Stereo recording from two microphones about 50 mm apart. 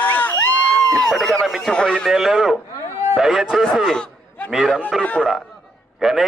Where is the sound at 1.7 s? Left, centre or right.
Centre.